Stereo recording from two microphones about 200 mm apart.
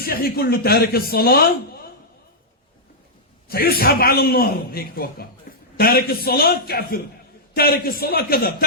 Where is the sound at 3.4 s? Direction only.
50° left (ahead or behind).